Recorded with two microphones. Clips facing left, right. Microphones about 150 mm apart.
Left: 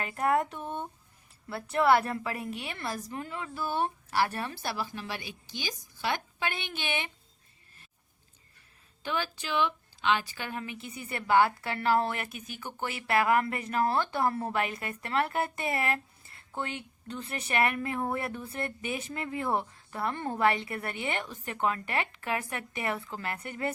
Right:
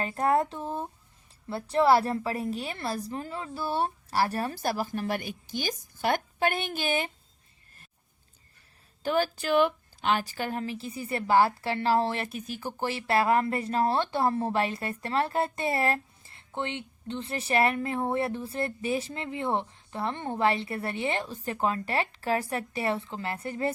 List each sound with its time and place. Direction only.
0.0 s a woman's voice: 30° right (ahead or behind)
9.0 s a woman's voice: 45° right (ahead or behind)